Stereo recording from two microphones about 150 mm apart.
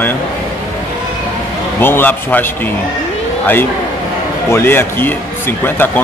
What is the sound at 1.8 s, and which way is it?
Speech, 15° left (ahead or behind).